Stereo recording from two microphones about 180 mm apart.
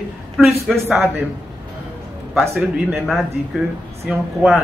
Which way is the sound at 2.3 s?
5° right (ahead or behind).